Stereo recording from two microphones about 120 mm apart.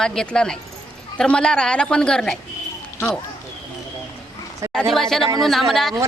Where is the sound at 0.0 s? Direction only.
5° left (ahead or behind).